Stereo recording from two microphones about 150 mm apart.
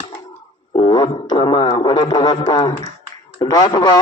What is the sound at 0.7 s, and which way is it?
A man's voice, 30° left (ahead or behind).